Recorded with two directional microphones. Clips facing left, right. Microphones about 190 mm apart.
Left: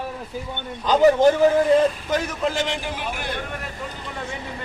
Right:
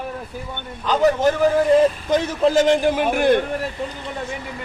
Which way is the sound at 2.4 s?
45° right (ahead or behind).